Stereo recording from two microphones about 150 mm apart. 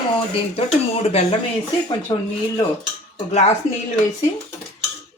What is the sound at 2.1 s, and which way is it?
Speech, 20° left (ahead or behind).